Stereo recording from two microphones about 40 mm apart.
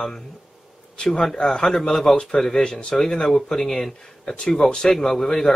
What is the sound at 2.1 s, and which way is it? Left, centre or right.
A man's voice, left.